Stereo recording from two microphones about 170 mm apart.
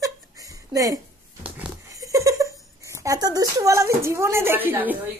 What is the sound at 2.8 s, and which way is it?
Speech, 20° right (ahead or behind).